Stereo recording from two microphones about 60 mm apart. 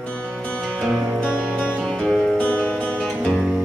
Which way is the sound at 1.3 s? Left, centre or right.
Centre.